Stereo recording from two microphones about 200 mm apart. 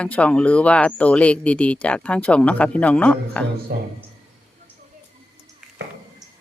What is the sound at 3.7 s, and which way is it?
Speech, 55° right (ahead or behind).